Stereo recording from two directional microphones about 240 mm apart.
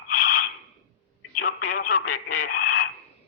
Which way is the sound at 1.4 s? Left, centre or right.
Left.